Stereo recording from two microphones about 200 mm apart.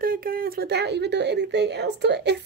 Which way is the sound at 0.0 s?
45° right (ahead or behind).